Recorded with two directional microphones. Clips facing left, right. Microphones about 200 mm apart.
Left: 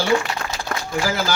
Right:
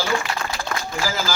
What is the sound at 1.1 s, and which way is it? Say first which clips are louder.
Speech: left 3 dB; 60° left (ahead or behind).